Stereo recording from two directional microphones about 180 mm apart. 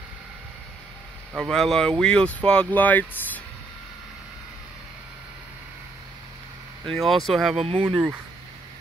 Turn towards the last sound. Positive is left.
turn(degrees=-30)  # may be behind; listen again after turning